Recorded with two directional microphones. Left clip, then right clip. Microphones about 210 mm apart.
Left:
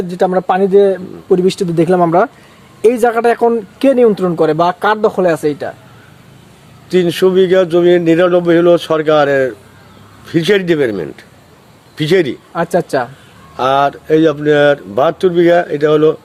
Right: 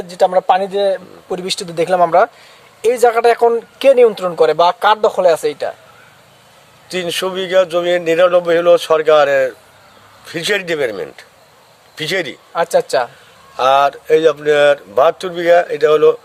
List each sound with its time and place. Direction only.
0.1 s speech: centre (ahead or behind)
6.9 s speech: 15° right (ahead or behind)
12.5 s speech: 5° left (ahead or behind)
13.6 s speech: 15° right (ahead or behind)